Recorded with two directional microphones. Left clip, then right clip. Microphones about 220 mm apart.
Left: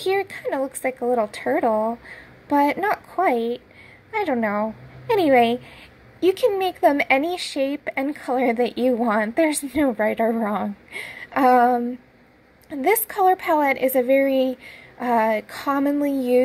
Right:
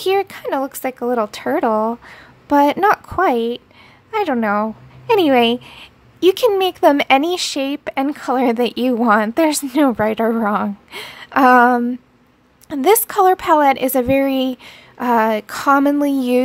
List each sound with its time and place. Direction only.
0.0 s a woman's voice: 25° right (ahead or behind)